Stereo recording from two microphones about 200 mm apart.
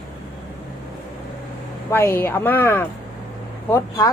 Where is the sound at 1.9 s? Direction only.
10° left (ahead or behind).